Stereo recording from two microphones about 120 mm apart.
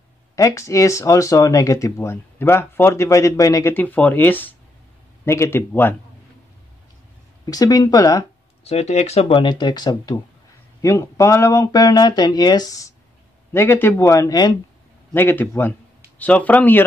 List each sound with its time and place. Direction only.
0.4 s speech: 25° left (ahead or behind)
3.7 s speech: 15° left (ahead or behind)
7.4 s speech: 30° left (ahead or behind)
8.6 s speech: 60° left (ahead or behind)
9.3 s speech: 40° left (ahead or behind)
10.8 s speech: 25° left (ahead or behind)
13.5 s speech: 20° left (ahead or behind)
15.1 s speech: 15° left (ahead or behind)